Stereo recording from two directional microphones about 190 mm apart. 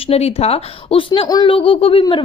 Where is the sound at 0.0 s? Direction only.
30° left (ahead or behind).